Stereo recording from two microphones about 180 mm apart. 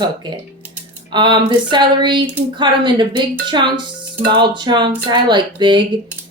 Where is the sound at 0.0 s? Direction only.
25° right (ahead or behind).